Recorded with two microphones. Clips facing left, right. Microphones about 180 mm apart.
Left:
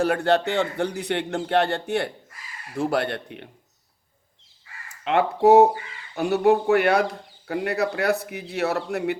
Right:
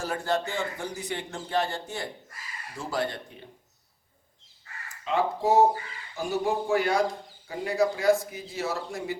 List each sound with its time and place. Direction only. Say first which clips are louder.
0.0 s a man's voice: left 8 dB; 65° left (ahead or behind)
4.9 s a man's voice: left 5 dB; 65° left (ahead or behind)